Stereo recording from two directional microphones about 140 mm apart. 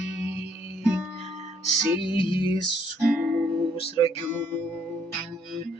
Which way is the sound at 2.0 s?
35° left (ahead or behind).